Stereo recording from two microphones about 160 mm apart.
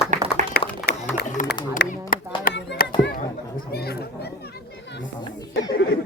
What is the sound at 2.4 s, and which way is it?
Music, 75° left (ahead or behind).